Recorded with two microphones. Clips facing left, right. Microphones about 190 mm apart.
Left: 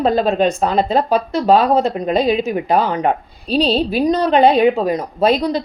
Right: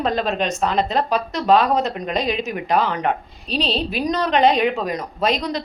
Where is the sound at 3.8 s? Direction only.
30° left (ahead or behind).